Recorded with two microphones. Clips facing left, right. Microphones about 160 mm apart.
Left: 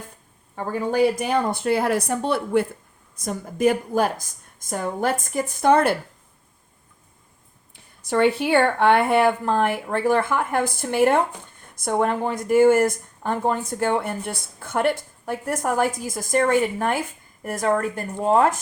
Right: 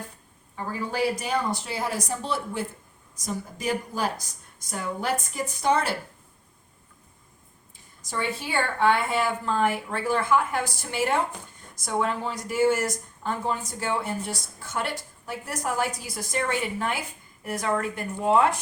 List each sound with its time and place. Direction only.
0.5 s a woman's voice: 55° left (ahead or behind)
8.0 s a woman's voice: 65° left (ahead or behind); by 18.4 s 40° left (ahead or behind)